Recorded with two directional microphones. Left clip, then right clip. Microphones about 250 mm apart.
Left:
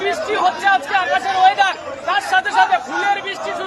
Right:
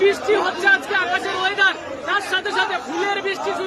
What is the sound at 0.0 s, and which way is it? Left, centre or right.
Chatter, centre.